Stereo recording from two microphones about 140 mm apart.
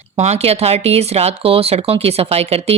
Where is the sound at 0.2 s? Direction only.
50° right (ahead or behind).